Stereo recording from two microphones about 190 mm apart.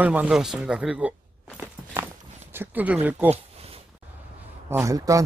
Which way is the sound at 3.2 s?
30° right (ahead or behind).